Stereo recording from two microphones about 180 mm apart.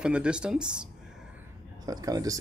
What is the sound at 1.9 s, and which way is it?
Speech, 20° right (ahead or behind).